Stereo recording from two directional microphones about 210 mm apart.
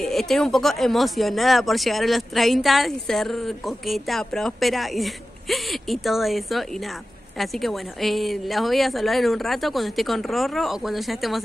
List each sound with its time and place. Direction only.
0.0 s speech: centre (ahead or behind)